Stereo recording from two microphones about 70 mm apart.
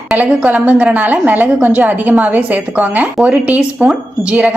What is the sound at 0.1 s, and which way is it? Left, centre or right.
A woman's voice, centre.